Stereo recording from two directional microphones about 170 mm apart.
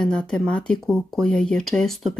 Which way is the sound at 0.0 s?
5° left (ahead or behind).